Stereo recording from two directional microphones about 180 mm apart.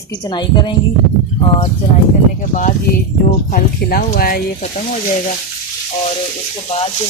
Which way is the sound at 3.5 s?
55° left (ahead or behind).